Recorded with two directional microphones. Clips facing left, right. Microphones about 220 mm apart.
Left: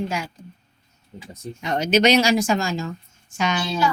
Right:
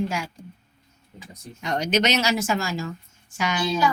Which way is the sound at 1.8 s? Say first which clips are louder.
Left 6 dB; 10° left (ahead or behind).